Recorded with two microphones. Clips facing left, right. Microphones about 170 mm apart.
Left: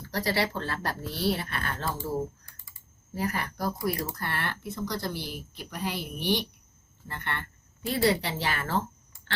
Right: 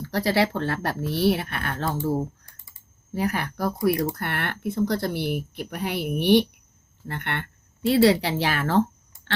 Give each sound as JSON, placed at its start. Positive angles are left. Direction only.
{"t": 0.1, "sound": "speech", "side_deg": -60}
{"t": 3.2, "sound": "speech", "side_deg": -65}